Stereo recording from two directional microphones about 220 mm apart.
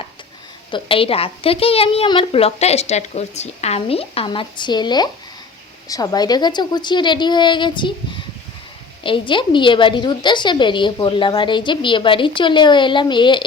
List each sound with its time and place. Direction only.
0.7 s a woman's voice: 25° left (ahead or behind)